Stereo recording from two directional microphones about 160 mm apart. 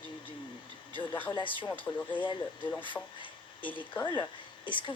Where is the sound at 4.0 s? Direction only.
30° left (ahead or behind).